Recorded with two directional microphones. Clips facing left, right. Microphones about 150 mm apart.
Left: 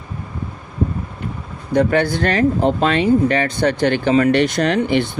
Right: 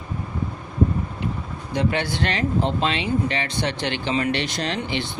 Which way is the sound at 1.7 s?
50° left (ahead or behind).